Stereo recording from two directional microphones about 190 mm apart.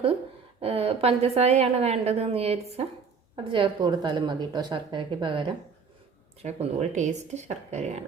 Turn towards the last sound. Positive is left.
turn(degrees=-35)  # may be behind; listen again after turning